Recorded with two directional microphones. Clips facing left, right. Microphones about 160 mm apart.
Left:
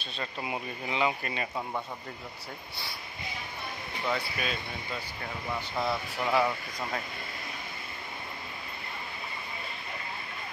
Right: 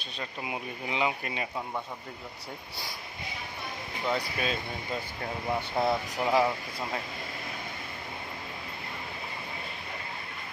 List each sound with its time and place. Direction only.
0.0 s speech: 10° right (ahead or behind)
4.2 s speech: 30° right (ahead or behind)
6.1 s speech: 15° right (ahead or behind)